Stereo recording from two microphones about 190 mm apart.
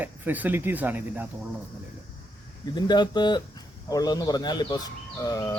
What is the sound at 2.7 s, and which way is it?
Speech, 20° left (ahead or behind).